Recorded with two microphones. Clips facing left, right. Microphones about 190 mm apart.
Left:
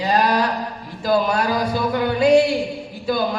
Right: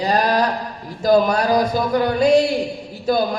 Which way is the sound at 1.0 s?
45° right (ahead or behind).